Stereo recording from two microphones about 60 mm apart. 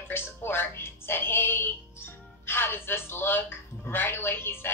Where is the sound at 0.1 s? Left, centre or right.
Left.